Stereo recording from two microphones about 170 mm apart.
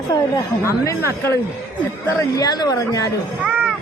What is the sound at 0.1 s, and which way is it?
Speech, 20° left (ahead or behind).